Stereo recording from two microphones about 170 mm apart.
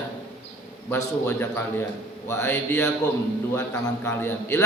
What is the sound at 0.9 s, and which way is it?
A man's voice, 15° left (ahead or behind).